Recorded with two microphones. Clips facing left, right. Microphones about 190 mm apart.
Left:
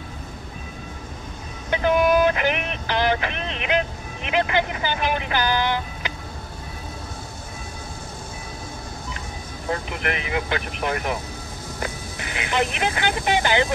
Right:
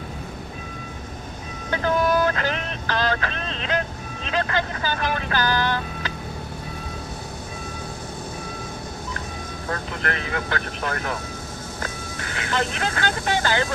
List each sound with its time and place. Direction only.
1.7 s vehicle: 15° left (ahead or behind)
9.7 s speech: 15° left (ahead or behind)